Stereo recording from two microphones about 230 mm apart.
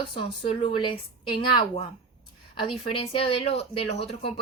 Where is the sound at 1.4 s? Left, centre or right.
Left.